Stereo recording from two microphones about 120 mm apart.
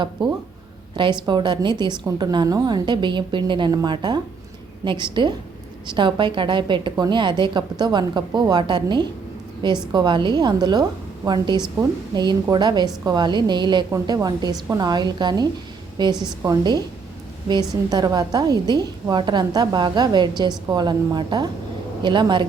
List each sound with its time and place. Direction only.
0.2 s a woman's voice: 40° right (ahead or behind)
17.9 s a woman's voice: 35° right (ahead or behind)